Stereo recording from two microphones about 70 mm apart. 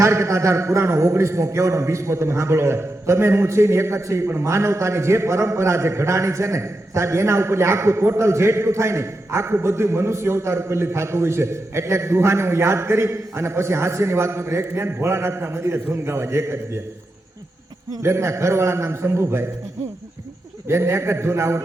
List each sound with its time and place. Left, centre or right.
0.0 s a man's voice: right
18.0 s a man's voice: right
20.7 s a man's voice: right